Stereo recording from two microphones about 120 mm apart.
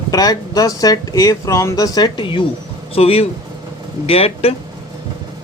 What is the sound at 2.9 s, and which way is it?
Speech, 55° left (ahead or behind).